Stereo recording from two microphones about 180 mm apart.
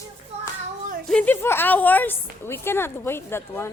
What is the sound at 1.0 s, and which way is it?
A woman's voice, 5° left (ahead or behind).